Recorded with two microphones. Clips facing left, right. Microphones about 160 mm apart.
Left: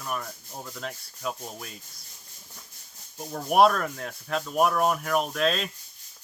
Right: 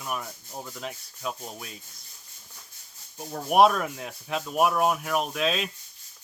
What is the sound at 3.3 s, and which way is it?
Speech, 5° right (ahead or behind).